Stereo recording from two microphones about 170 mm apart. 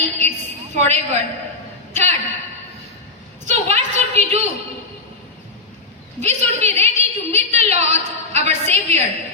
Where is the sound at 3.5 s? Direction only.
40° right (ahead or behind).